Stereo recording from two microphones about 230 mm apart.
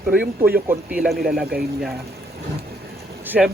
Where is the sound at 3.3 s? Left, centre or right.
Centre.